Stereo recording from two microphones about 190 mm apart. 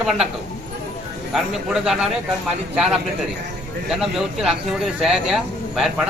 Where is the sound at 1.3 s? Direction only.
5° right (ahead or behind).